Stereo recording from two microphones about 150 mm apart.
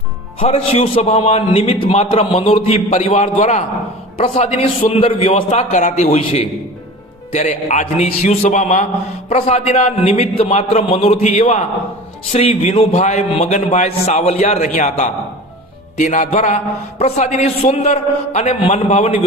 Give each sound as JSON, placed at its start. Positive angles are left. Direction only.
{"t": 0.3, "sound": "a man's voice", "side_deg": 40}